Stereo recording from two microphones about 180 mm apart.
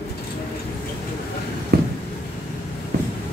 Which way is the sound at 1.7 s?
60° right (ahead or behind).